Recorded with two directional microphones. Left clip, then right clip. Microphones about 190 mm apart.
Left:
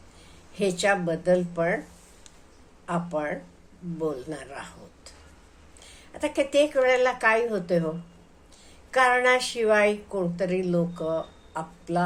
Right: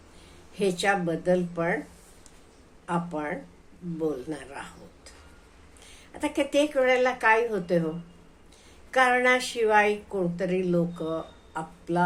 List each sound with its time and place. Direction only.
0.5 s a woman's voice: 10° left (ahead or behind)
2.8 s a woman's voice: 10° left (ahead or behind)
8.9 s a woman's voice: 10° left (ahead or behind)